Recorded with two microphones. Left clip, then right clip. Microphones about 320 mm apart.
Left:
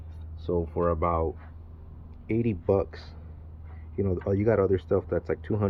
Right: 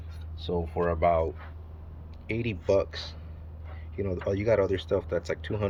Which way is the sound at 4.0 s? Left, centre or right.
Centre.